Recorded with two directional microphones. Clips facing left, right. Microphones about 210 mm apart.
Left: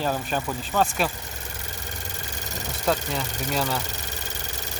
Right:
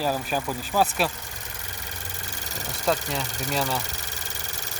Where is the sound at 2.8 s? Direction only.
Centre (ahead or behind).